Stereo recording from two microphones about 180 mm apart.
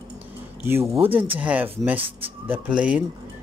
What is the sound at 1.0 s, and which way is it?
Speech, 30° right (ahead or behind).